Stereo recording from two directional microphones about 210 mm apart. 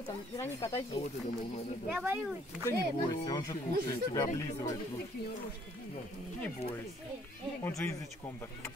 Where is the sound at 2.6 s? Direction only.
15° left (ahead or behind).